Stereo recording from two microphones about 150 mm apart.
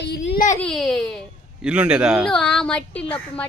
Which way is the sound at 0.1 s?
60° left (ahead or behind).